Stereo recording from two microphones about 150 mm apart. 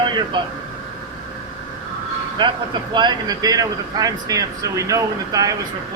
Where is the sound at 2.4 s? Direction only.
30° right (ahead or behind).